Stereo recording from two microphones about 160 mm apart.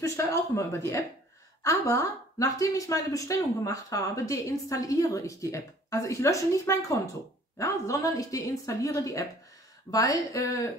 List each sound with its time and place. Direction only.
0.0 s a woman's voice: 20° left (ahead or behind)